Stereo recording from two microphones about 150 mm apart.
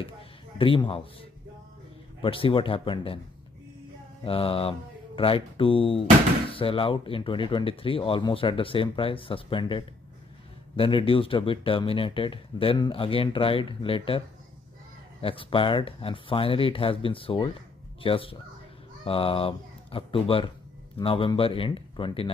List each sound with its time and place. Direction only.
0.6 s speech: 35° left (ahead or behind)
2.2 s speech: 35° left (ahead or behind)
4.2 s speech: 35° left (ahead or behind)